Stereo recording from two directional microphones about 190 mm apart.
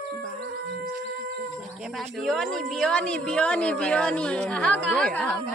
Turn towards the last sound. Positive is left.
turn(degrees=5)  # may be behind; listen again after turning